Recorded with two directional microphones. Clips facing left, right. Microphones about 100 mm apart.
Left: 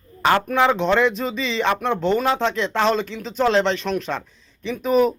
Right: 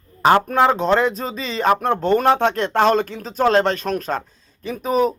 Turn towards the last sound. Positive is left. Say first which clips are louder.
# left 1 dB
turn(degrees=-40)  # may be behind; listen again after turning